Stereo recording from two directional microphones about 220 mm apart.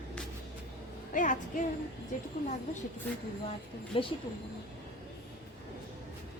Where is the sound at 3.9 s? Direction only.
25° left (ahead or behind).